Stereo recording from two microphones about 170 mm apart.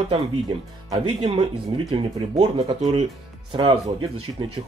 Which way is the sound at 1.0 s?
35° right (ahead or behind).